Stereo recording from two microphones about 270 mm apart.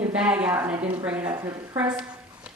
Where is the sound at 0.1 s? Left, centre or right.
Centre.